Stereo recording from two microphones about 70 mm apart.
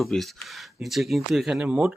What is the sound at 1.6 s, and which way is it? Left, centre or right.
Speech, centre.